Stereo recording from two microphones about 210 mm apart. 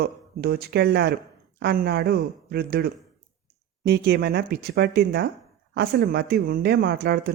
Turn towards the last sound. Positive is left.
turn(degrees=-50)  # may be behind; listen again after turning